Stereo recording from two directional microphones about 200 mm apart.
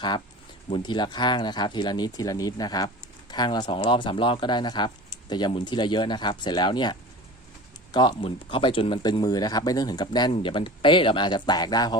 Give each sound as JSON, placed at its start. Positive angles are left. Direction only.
{"t": 0.7, "sound": "speech", "side_deg": 20}
{"t": 7.9, "sound": "speech", "side_deg": 25}